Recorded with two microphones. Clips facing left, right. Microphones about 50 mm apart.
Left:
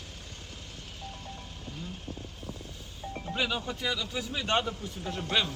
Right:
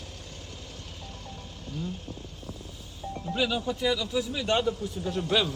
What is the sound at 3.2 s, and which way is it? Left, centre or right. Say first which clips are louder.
A man's voice: right 4 dB; centre.